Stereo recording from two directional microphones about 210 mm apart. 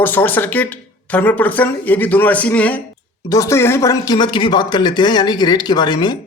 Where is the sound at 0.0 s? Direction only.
10° left (ahead or behind).